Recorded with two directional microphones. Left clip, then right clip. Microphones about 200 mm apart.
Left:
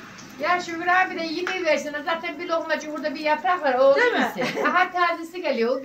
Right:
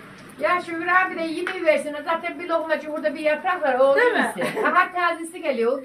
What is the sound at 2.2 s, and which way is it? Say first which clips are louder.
A woman's voice: right 1 dB; 5° left (ahead or behind).